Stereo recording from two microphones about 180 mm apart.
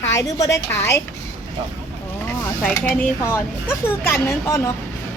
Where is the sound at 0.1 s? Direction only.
20° left (ahead or behind).